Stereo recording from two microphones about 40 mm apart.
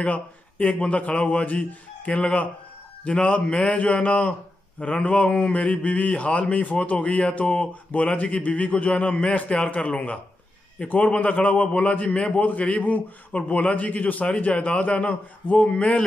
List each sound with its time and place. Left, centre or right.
0.0 s mantra: left
9.0 s speech: left
9.3 s mantra: left
12.1 s speech: left
12.4 s mantra: left
14.2 s mantra: left
15.5 s speech: left